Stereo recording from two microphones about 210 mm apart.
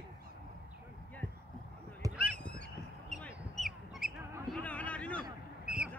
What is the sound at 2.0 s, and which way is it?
Honk, 15° right (ahead or behind).